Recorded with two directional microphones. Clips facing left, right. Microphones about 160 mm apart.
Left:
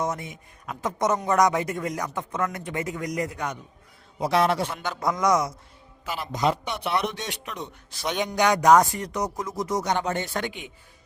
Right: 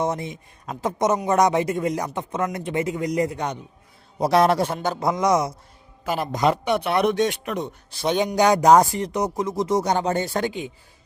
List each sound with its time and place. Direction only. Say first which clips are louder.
0.0 s speech: right 4 dB; 30° right (ahead or behind)
4.2 s a man's voice: right 4 dB; 40° right (ahead or behind)
4.9 s speech: right 1 dB; 25° right (ahead or behind)
6.1 s speech: right 4 dB; 50° right (ahead or behind)
7.9 s a man's voice: right 6 dB; 30° right (ahead or behind)